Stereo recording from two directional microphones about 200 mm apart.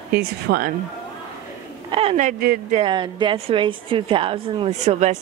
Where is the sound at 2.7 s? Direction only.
25° right (ahead or behind).